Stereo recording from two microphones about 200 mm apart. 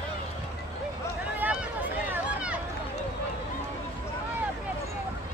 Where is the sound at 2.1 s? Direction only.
5° right (ahead or behind).